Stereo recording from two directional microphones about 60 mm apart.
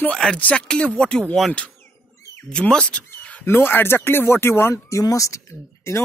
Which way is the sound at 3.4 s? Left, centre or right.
Left.